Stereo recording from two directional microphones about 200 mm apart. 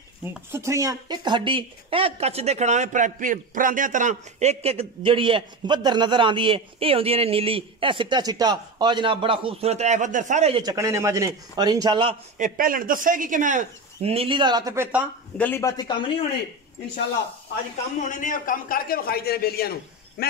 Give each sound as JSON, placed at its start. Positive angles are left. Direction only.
{"t": 0.2, "sound": "speech", "side_deg": -10}
{"t": 10.6, "sound": "speech", "side_deg": -15}
{"t": 12.4, "sound": "speech", "side_deg": -45}
{"t": 15.3, "sound": "speech", "side_deg": 10}
{"t": 18.0, "sound": "a man's voice", "side_deg": 40}